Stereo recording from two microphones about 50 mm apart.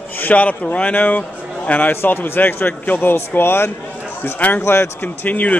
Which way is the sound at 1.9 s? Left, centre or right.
Left.